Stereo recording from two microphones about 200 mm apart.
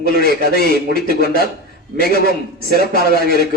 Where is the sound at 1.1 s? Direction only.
50° right (ahead or behind).